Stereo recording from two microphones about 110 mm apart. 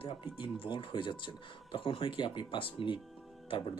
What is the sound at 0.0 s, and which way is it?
A man's voice, 50° left (ahead or behind).